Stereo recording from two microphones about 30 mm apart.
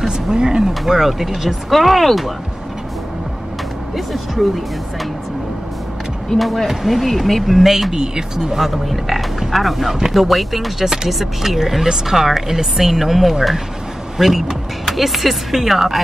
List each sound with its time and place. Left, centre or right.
0.0 s speech: right
0.8 s speech: centre
3.9 s speech: centre
6.3 s speech: centre
7.4 s speech: centre
7.9 s speech: right
8.5 s speech: centre